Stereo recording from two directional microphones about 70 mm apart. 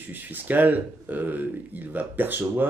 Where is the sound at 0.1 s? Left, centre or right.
Right.